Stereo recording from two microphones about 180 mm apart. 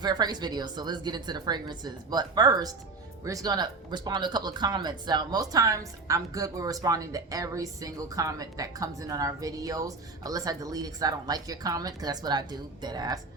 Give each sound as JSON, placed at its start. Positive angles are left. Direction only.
{"t": 0.0, "sound": "speech", "side_deg": -25}